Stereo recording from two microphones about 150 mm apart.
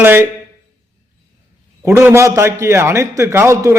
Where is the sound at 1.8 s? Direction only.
15° right (ahead or behind).